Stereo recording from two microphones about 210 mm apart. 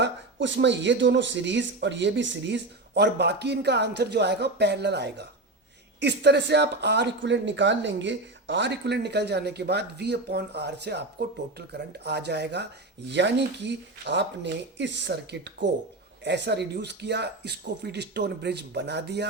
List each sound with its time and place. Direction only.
0.0 s speech: 60° right (ahead or behind)